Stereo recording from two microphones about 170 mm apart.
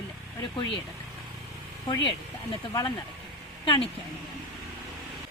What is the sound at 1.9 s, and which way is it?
Speech, 25° left (ahead or behind).